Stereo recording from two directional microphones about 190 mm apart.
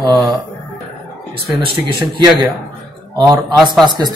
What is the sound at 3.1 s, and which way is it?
Speech, 20° right (ahead or behind).